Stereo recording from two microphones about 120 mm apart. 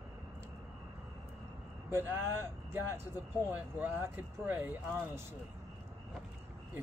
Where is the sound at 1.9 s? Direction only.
20° right (ahead or behind).